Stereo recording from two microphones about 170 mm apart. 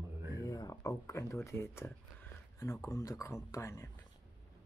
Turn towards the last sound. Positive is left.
turn(degrees=15)  # may be behind; listen again after turning